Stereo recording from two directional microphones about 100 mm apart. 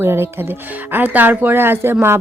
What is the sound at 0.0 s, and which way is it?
Speech, 25° right (ahead or behind).